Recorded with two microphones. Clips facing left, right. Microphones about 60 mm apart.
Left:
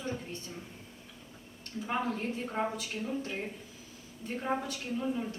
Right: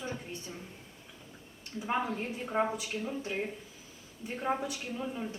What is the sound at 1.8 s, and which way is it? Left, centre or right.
Speech, centre.